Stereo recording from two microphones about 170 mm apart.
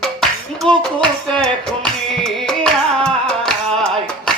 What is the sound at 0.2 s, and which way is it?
Music, 5° left (ahead or behind).